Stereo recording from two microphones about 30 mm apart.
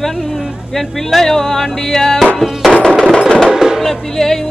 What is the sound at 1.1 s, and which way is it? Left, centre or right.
Music, centre.